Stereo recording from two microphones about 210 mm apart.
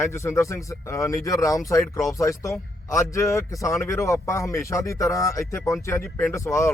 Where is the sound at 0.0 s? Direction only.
15° left (ahead or behind).